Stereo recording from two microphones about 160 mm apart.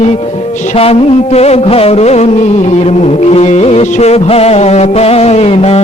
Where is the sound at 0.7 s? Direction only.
40° left (ahead or behind).